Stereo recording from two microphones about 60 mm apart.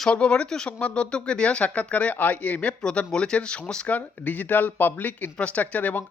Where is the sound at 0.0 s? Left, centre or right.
Centre.